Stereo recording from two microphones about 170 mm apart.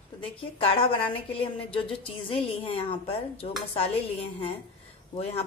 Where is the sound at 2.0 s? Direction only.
30° left (ahead or behind).